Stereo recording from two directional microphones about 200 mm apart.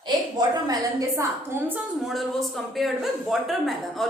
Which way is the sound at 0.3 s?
20° right (ahead or behind).